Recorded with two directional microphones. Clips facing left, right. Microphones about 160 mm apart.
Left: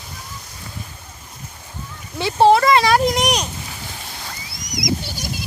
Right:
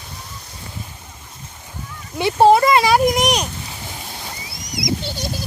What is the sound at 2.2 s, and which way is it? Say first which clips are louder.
Speech: right 1 dB; 15° right (ahead or behind).